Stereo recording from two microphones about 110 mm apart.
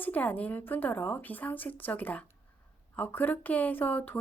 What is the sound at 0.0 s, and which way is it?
A woman's voice, 15° left (ahead or behind).